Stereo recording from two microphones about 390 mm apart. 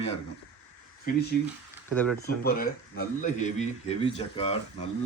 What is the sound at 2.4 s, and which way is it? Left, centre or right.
A man's voice, left.